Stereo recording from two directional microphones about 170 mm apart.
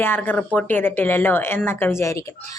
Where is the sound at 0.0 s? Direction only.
10° left (ahead or behind).